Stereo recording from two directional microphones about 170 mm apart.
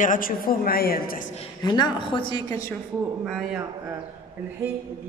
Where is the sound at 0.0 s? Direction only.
55° left (ahead or behind).